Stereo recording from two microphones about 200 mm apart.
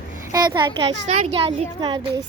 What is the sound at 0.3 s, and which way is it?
Speech, 20° right (ahead or behind).